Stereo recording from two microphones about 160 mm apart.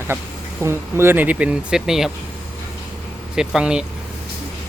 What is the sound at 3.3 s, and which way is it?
Speech, 5° right (ahead or behind).